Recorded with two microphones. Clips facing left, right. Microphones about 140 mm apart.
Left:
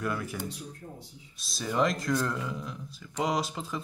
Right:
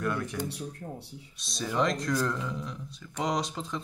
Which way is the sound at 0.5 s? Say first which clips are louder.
Right 4 dB; 65° right (ahead or behind).